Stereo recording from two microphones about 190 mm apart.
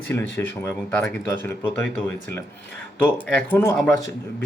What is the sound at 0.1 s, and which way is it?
Speech, 10° left (ahead or behind).